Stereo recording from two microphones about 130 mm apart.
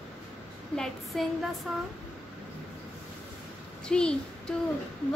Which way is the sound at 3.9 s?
5° left (ahead or behind).